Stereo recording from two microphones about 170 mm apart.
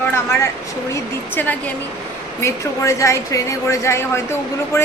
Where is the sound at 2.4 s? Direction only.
15° left (ahead or behind).